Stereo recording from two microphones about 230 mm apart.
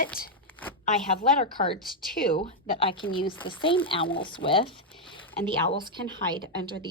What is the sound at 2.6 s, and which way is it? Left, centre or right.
A woman's voice, left.